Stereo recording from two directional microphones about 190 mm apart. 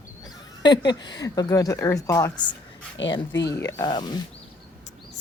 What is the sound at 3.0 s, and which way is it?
Speech, 70° left (ahead or behind).